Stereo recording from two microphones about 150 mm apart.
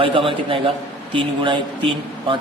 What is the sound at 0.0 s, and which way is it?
A man's voice, 35° right (ahead or behind).